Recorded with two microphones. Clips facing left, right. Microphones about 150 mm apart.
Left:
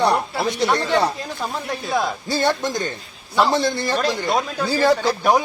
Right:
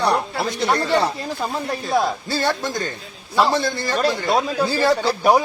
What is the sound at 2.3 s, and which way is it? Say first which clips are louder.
Speech: left 2 dB; 20° left (ahead or behind).